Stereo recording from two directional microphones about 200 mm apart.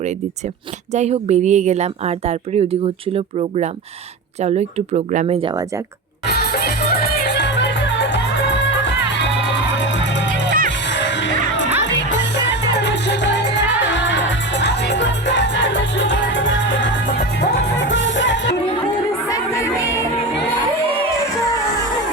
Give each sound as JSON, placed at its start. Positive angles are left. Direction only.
{"t": 0.9, "sound": "a woman's voice", "side_deg": -35}
{"t": 6.2, "sound": "music", "side_deg": 50}
{"t": 17.4, "sound": "music", "side_deg": 55}
{"t": 19.3, "sound": "music", "side_deg": 15}